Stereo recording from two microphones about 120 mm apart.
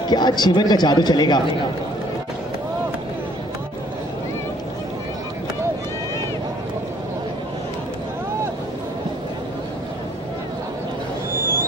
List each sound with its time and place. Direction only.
0.1 s a man's voice: 35° left (ahead or behind)